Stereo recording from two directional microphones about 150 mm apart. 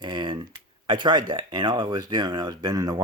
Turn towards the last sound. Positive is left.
turn(degrees=-25)  # may be behind; listen again after turning